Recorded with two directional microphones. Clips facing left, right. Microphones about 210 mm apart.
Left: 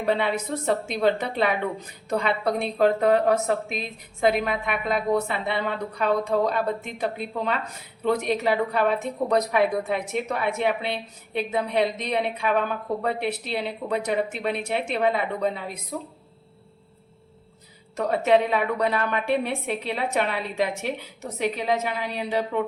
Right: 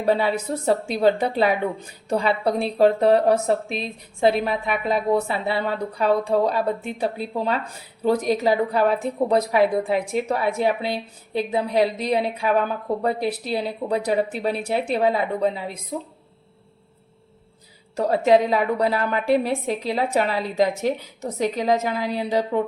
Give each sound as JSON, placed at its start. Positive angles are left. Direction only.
{"t": 0.0, "sound": "a woman's voice", "side_deg": -35}
{"t": 17.9, "sound": "a woman's voice", "side_deg": -35}